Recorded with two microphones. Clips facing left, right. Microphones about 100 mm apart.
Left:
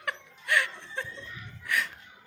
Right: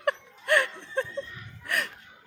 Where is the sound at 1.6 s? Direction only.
55° right (ahead or behind).